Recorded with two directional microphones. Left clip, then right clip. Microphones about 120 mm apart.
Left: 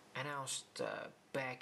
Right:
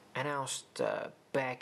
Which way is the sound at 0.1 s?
20° right (ahead or behind).